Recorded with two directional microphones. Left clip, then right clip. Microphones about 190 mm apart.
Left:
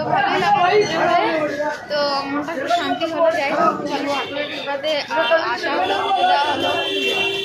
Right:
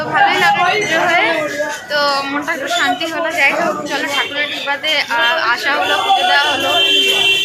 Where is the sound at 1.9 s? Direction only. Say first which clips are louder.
Right 6 dB; centre (ahead or behind).